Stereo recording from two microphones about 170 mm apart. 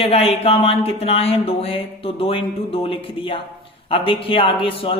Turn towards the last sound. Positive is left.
turn(degrees=30)  # may be behind; listen again after turning